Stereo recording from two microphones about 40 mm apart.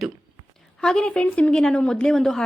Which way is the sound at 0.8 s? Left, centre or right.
Centre.